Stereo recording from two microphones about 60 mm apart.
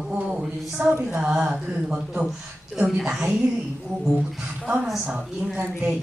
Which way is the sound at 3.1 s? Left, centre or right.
Centre.